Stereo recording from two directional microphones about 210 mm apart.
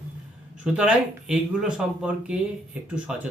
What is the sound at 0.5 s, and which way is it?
Speech, 5° right (ahead or behind).